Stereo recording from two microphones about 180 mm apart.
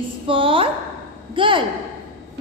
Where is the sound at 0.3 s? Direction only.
30° right (ahead or behind).